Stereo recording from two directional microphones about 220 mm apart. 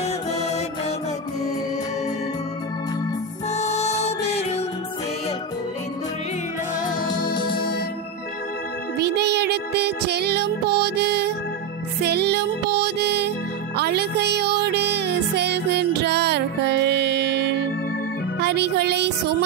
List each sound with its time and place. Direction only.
3.5 s music: 30° left (ahead or behind)
7.3 s music: 20° left (ahead or behind)
9.0 s music: 50° right (ahead or behind)